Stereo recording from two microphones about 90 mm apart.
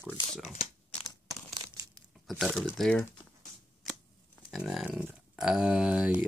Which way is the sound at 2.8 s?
10° left (ahead or behind).